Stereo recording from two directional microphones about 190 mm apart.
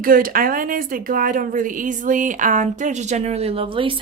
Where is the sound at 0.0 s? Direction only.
50° right (ahead or behind).